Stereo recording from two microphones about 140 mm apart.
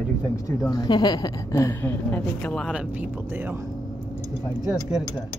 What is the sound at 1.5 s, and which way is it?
A woman's voice, 20° left (ahead or behind).